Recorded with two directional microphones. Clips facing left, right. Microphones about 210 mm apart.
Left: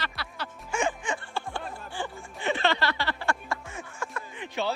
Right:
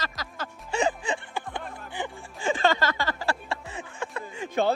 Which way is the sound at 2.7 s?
45° right (ahead or behind).